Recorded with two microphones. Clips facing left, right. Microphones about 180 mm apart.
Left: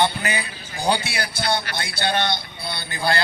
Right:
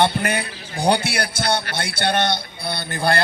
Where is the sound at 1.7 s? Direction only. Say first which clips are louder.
Right 2 dB; 65° right (ahead or behind).